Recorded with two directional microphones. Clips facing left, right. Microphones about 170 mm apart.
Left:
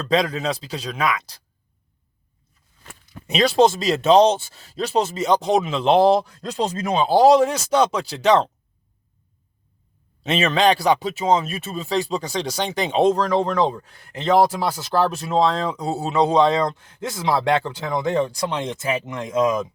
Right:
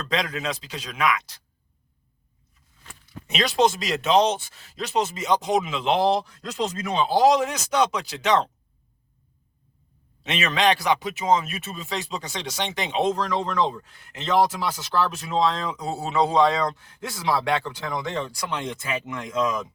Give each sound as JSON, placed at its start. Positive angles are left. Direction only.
{"t": 0.1, "sound": "speech", "side_deg": 30}
{"t": 3.2, "sound": "speech", "side_deg": 30}
{"t": 10.2, "sound": "speech", "side_deg": 30}